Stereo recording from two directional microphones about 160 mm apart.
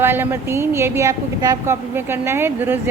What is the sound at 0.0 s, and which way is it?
A woman's voice, 15° right (ahead or behind).